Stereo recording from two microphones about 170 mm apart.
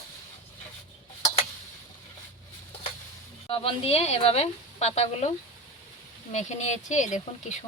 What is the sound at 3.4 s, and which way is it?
Speech, 35° left (ahead or behind).